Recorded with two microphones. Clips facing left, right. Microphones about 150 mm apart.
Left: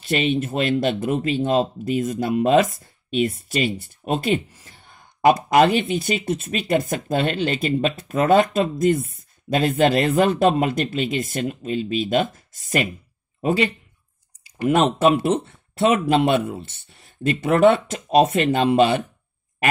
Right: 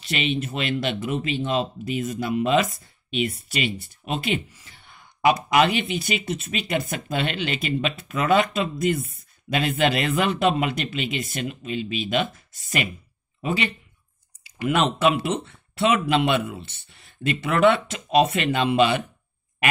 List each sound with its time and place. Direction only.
0.0 s speech: 45° left (ahead or behind)